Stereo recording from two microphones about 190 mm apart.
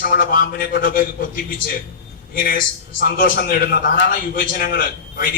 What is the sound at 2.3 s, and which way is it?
A man's voice, 50° left (ahead or behind).